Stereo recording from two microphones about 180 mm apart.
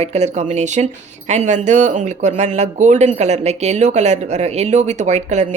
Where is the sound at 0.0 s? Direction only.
35° right (ahead or behind).